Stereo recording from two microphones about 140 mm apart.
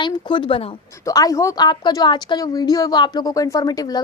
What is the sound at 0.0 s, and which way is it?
A woman's voice, 35° left (ahead or behind).